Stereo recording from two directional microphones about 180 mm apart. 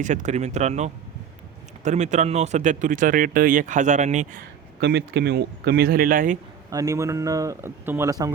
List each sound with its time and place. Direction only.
0.0 s speech: 45° right (ahead or behind)
4.8 s speech: 70° right (ahead or behind); by 6.4 s 50° right (ahead or behind)
6.7 s a man's voice: 20° right (ahead or behind)